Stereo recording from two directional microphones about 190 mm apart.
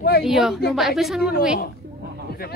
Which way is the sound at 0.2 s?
Centre (ahead or behind).